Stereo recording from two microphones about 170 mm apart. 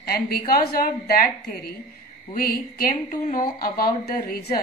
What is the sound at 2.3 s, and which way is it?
Speech, 60° left (ahead or behind).